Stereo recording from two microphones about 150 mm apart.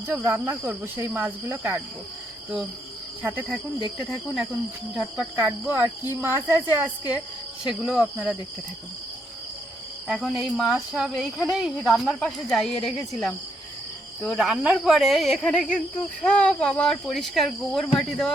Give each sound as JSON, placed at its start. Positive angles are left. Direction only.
{"t": 0.1, "sound": "cricket", "side_deg": -15}
{"t": 3.2, "sound": "cricket", "side_deg": -15}
{"t": 4.9, "sound": "cricket", "side_deg": -10}
{"t": 7.7, "sound": "speech", "side_deg": -5}
{"t": 10.1, "sound": "speech", "side_deg": 0}